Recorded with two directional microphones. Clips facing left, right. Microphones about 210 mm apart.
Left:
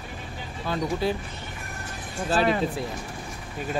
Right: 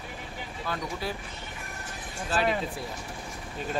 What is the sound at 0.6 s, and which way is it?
Speech, 25° left (ahead or behind).